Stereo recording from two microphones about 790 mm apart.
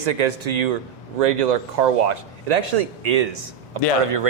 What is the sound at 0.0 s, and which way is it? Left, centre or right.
Speech, right.